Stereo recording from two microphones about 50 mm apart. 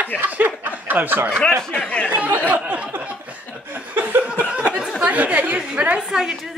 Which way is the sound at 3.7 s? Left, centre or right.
Right.